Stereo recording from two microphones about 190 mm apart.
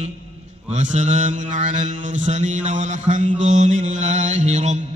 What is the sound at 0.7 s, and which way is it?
Mantra, 40° right (ahead or behind).